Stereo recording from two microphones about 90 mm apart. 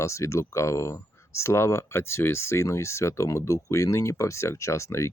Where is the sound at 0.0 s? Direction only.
35° left (ahead or behind).